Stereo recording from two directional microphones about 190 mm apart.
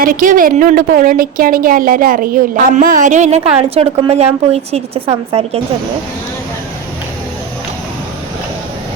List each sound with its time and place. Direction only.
0.0 s a woman's voice: 45° right (ahead or behind)